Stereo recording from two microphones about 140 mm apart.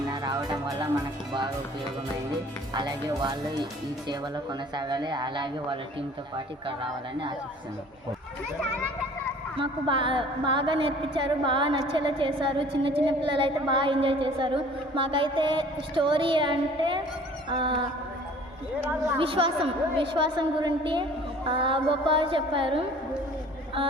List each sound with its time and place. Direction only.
0.1 s music: 30° right (ahead or behind)
1.3 s a woman's voice: 35° right (ahead or behind)
2.7 s a woman's voice: 30° right (ahead or behind)
4.7 s a woman's voice: 30° right (ahead or behind)
9.6 s a woman's voice: 35° right (ahead or behind)
19.2 s a woman's voice: 40° right (ahead or behind)